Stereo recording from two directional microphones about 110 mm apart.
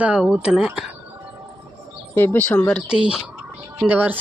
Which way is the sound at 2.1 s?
20° left (ahead or behind).